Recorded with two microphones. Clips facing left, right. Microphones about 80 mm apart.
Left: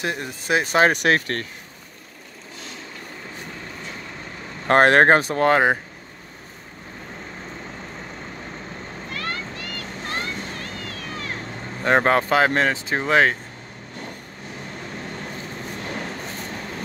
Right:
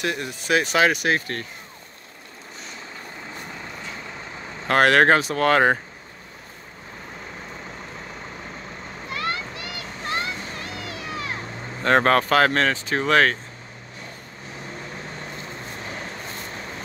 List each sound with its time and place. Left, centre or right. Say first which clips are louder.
0.0 s speech: even; left
0.9 s speech: left 3 dB; left
4.6 s speech: left 2 dB; left
9.1 s a sound: right 3 dB; centre
11.8 s speech: even; centre